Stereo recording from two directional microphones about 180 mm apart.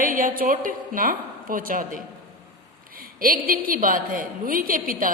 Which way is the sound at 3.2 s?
55° right (ahead or behind).